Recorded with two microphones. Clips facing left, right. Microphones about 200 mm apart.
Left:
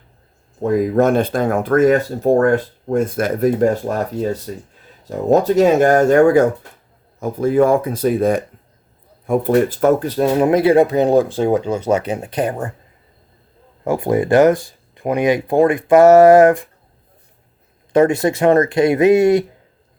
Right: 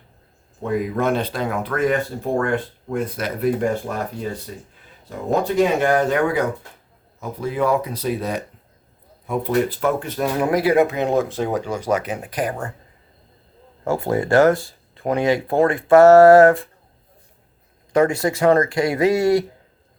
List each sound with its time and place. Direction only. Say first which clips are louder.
0.6 s speech: left 7 dB; 45° left (ahead or behind); by 12.7 s 25° left (ahead or behind)
13.8 s speech: left 4 dB; 15° left (ahead or behind)
17.9 s speech: left 4 dB; 25° left (ahead or behind)